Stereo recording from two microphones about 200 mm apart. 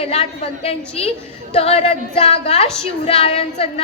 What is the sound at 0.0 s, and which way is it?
A woman's voice, 30° left (ahead or behind).